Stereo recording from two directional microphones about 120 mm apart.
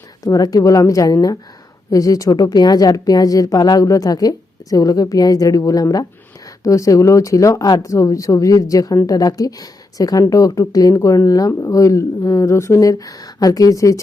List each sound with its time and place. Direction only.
0.3 s a woman's voice: 30° left (ahead or behind)